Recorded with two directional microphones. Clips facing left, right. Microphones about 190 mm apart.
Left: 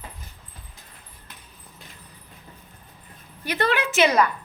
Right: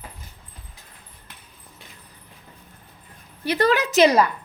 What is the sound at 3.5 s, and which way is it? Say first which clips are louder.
Speech: right 4 dB; 40° right (ahead or behind).